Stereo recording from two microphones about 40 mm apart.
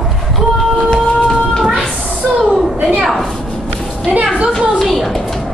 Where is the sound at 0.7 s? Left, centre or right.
Centre.